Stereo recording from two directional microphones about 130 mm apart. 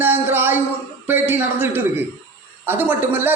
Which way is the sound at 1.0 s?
15° right (ahead or behind).